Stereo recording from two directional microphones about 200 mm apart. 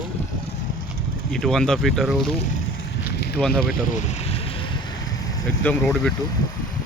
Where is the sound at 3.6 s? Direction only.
45° left (ahead or behind).